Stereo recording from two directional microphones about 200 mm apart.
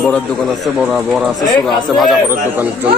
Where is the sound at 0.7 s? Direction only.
5° right (ahead or behind).